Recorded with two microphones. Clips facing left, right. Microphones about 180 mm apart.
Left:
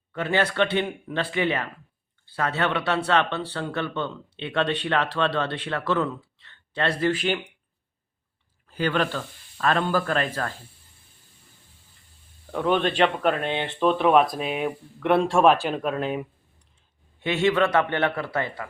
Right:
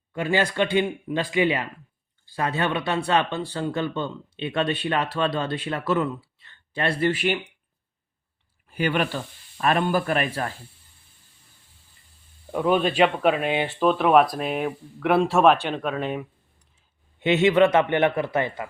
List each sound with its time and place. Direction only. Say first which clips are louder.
0.1 s speech: right 1 dB; 10° right (ahead or behind)
8.6 s speech: even; 10° right (ahead or behind)
12.5 s speech: right 1 dB; 10° right (ahead or behind)
17.2 s a man's voice: right 4 dB; 20° right (ahead or behind)